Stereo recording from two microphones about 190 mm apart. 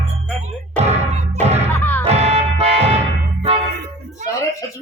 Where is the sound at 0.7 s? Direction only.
35° right (ahead or behind).